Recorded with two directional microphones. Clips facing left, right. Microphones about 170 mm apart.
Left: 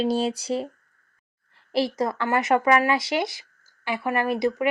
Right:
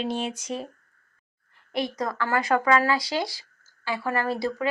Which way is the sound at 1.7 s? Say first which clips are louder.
Left 4 dB; 30° left (ahead or behind).